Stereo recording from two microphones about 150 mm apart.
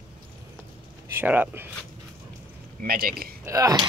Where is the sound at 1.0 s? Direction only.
15° right (ahead or behind).